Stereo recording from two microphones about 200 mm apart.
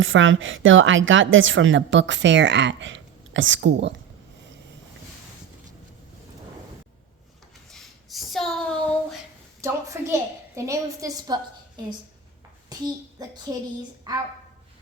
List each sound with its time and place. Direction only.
0.0 s a woman's voice: 75° right (ahead or behind)
7.7 s a sound: centre (ahead or behind)
9.6 s a woman's voice: 15° right (ahead or behind)
12.6 s child singing: 20° right (ahead or behind)
14.1 s speech: 20° right (ahead or behind)